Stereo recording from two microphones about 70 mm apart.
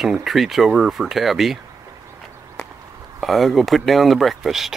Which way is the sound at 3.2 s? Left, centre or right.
Centre.